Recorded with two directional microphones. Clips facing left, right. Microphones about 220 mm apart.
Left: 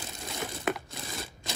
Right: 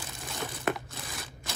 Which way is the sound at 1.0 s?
25° left (ahead or behind).